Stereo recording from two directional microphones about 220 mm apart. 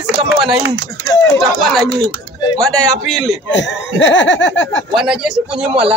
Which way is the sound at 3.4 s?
55° left (ahead or behind).